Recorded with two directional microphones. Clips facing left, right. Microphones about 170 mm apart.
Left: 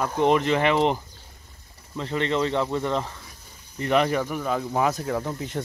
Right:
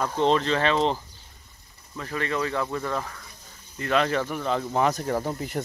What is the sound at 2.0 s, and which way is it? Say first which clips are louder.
Speech: left 4 dB; 25° left (ahead or behind).